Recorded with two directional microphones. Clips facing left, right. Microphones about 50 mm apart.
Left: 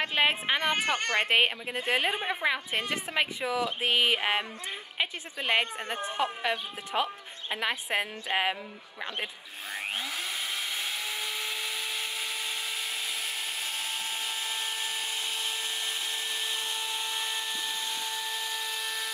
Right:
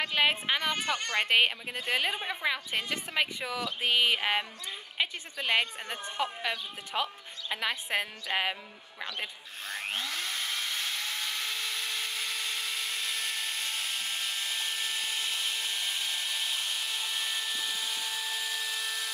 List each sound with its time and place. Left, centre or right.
0.0 s a woman's voice: centre
0.8 s a woman's voice: left
1.2 s a woman's voice: centre
6.2 s a woman's voice: left
9.7 s vacuum cleaner: centre